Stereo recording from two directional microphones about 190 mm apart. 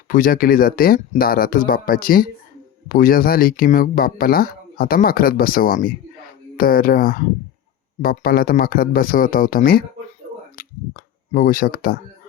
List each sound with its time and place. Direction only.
0.1 s speech: 45° left (ahead or behind)